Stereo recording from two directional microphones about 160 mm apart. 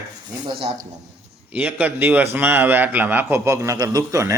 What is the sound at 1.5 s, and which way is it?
A man's voice, 10° right (ahead or behind).